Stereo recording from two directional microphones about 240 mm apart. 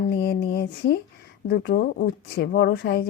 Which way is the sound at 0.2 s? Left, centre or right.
Left.